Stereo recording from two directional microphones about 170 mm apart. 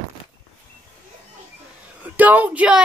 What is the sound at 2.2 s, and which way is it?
Speech, 10° right (ahead or behind).